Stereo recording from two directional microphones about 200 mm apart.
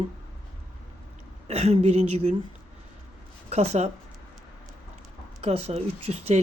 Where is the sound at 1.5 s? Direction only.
35° right (ahead or behind).